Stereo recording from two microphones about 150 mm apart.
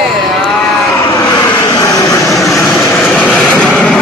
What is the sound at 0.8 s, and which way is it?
Vehicle, 20° left (ahead or behind).